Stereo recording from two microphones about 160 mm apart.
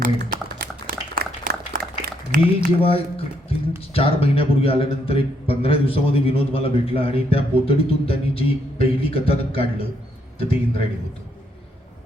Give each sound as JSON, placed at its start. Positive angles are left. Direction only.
{"t": 0.0, "sound": "a sound", "side_deg": -75}
{"t": 2.3, "sound": "speech", "side_deg": -60}
{"t": 2.8, "sound": "a man's voice", "side_deg": 35}